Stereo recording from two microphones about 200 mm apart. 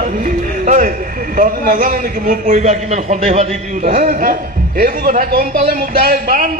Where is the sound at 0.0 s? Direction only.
40° right (ahead or behind).